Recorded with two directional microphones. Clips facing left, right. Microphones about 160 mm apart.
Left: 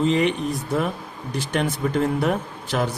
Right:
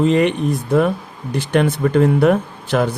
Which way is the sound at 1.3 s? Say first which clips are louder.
Right 7 dB; 60° right (ahead or behind).